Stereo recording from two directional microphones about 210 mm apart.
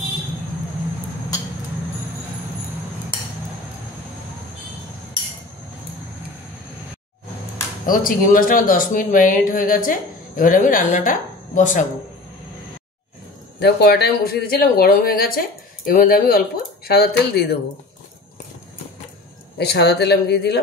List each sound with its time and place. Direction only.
7.8 s speech: 40° left (ahead or behind)
13.6 s speech: 50° left (ahead or behind)
19.6 s speech: 50° left (ahead or behind)